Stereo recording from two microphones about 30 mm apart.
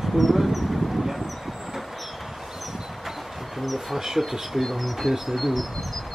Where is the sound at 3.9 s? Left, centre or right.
Centre.